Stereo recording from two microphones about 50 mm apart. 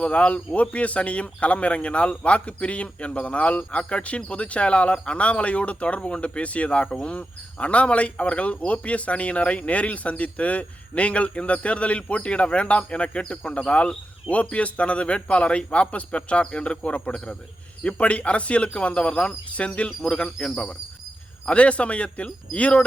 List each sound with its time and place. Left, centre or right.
0.0 s speech: left